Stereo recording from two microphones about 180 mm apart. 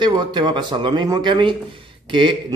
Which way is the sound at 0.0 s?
25° right (ahead or behind).